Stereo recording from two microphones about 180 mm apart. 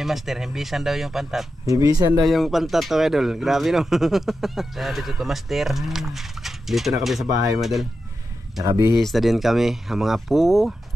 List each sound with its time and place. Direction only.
0.0 s speech: centre (ahead or behind)
1.7 s speech: 20° right (ahead or behind)
2.2 s speech: centre (ahead or behind)
8.6 s speech: 15° right (ahead or behind)
9.0 s speech: centre (ahead or behind)